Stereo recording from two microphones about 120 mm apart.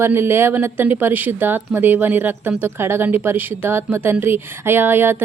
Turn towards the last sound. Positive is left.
turn(degrees=-20)  # may be behind; listen again after turning